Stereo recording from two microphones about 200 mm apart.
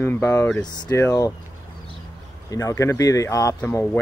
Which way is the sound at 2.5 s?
15° left (ahead or behind).